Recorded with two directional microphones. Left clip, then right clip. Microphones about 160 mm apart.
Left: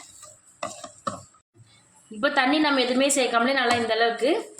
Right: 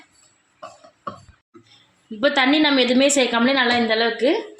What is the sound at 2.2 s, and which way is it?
Speech, 35° right (ahead or behind).